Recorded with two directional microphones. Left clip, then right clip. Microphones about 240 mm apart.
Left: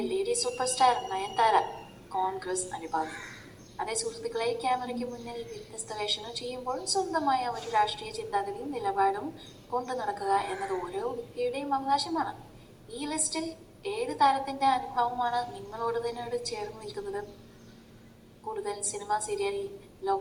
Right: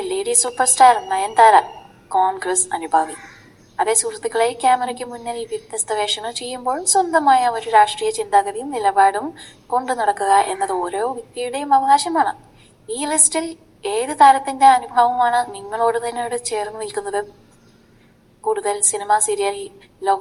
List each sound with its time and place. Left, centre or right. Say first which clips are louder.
0.0 s a sound: right 7 dB; right
0.4 s a woman's voice: right 14 dB; right
18.4 s a woman's voice: right 14 dB; right